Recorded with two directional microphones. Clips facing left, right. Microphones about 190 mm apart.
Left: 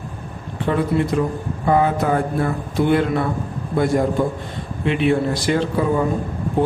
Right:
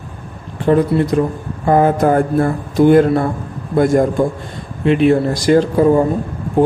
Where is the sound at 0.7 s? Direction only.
40° right (ahead or behind).